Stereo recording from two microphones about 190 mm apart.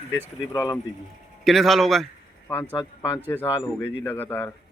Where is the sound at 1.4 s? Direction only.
Centre (ahead or behind).